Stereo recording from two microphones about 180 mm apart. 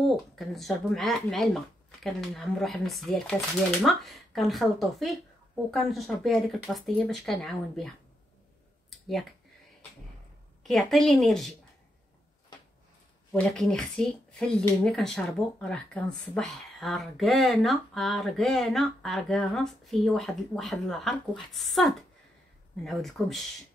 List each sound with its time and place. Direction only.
0.0 s speech: centre (ahead or behind)
10.6 s speech: centre (ahead or behind)
13.3 s speech: 5° left (ahead or behind)